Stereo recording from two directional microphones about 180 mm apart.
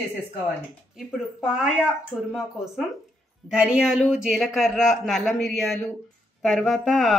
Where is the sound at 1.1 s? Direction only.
5° right (ahead or behind).